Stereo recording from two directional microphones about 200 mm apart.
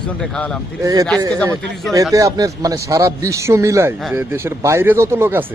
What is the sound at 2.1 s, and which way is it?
Speech, 15° right (ahead or behind).